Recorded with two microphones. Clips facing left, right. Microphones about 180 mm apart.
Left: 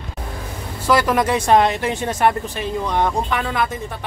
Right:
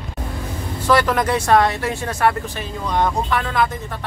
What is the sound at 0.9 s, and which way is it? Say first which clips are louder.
Speech: even; 10° left (ahead or behind).